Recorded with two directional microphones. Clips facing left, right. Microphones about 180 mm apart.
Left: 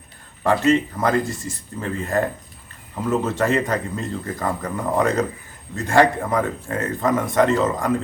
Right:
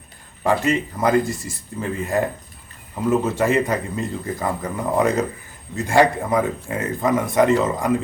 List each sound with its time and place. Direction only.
0.4 s speech: 10° right (ahead or behind)